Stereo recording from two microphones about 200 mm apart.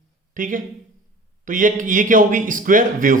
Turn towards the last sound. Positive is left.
turn(degrees=-45)  # may be behind; listen again after turning